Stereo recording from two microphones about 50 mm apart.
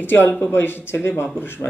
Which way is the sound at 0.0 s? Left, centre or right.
Left.